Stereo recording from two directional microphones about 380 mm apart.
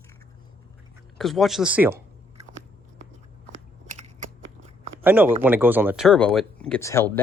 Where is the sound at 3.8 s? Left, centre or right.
Centre.